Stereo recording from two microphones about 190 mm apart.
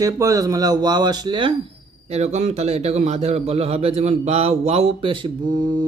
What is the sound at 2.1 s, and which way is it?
A man's voice, 35° right (ahead or behind).